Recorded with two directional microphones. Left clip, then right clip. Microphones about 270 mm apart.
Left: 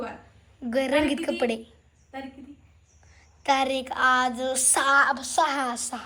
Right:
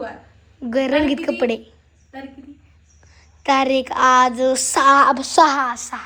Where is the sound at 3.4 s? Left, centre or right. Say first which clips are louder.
Right 7 dB; centre.